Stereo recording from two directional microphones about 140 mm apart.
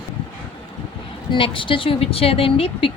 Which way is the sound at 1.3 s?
35° left (ahead or behind).